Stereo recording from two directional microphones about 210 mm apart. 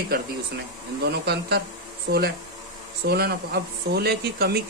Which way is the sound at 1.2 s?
50° right (ahead or behind).